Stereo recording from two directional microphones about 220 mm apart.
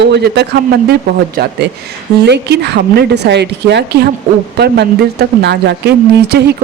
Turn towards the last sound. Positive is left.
turn(degrees=-50)  # may be behind; listen again after turning